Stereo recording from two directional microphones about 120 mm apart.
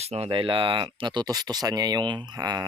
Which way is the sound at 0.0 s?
60° right (ahead or behind).